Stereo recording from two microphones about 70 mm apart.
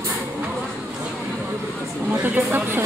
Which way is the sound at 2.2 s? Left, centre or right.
Right.